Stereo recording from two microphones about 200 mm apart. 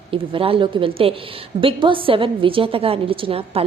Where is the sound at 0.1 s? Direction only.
25° right (ahead or behind).